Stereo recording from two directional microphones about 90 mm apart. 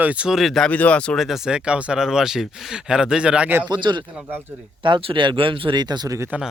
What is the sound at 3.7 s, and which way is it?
Speech, 60° right (ahead or behind).